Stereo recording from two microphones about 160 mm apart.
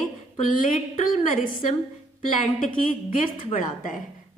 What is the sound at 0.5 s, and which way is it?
A woman's voice, 60° left (ahead or behind).